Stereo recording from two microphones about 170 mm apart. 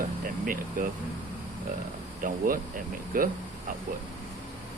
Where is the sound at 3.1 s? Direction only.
55° right (ahead or behind).